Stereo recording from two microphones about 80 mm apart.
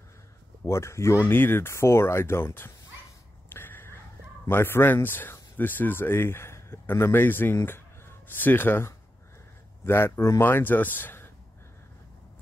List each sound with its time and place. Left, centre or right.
0.7 s speech: left
3.4 s a sound: left
4.5 s speech: left
10.4 s speech: left